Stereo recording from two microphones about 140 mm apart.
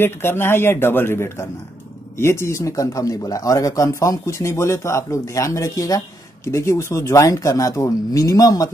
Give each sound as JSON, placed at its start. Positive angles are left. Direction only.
{"t": 0.0, "sound": "a man's voice", "side_deg": 15}